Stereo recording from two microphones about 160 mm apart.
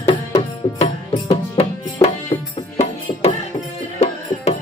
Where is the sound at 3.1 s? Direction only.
35° left (ahead or behind).